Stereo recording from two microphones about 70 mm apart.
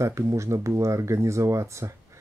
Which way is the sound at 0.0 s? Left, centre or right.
Right.